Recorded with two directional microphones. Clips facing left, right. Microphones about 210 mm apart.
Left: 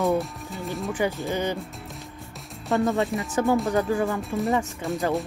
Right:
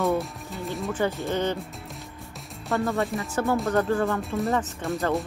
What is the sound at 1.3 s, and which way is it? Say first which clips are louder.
Speech: right 1 dB; 10° left (ahead or behind).